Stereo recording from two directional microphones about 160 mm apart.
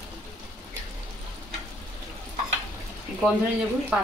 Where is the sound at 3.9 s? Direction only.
5° right (ahead or behind).